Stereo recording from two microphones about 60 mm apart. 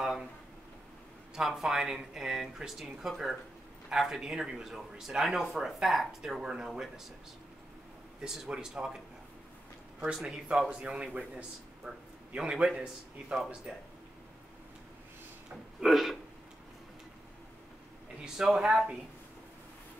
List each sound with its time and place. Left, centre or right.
0.0 s a sound: centre
1.3 s speech: centre
8.2 s speech: centre
10.1 s a man's voice: centre
15.8 s speech: centre
18.2 s speech: centre